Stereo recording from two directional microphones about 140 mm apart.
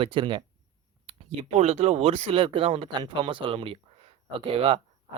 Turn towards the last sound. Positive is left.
turn(degrees=-40)  # may be behind; listen again after turning